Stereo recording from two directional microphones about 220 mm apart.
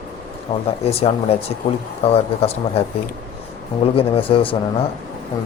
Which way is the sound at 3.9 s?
25° left (ahead or behind).